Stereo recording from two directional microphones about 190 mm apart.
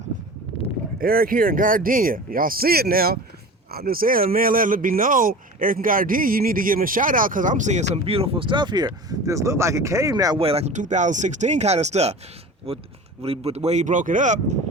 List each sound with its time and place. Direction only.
0.9 s speech: 50° right (ahead or behind); by 10.4 s 20° right (ahead or behind)
10.4 s speech: 35° right (ahead or behind)